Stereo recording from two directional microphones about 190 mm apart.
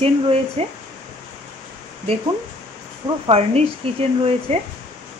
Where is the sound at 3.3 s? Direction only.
30° right (ahead or behind).